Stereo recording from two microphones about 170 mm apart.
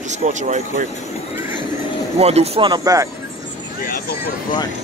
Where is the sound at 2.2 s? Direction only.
40° right (ahead or behind); by 3.1 s 20° right (ahead or behind).